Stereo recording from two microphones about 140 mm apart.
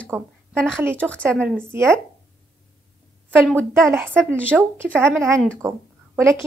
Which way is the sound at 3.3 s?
15° right (ahead or behind).